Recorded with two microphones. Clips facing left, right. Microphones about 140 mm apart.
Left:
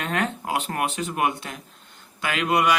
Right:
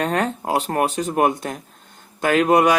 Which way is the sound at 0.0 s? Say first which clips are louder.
Right 5 dB; 40° right (ahead or behind).